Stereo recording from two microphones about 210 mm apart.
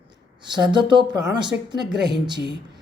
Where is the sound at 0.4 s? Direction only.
20° right (ahead or behind).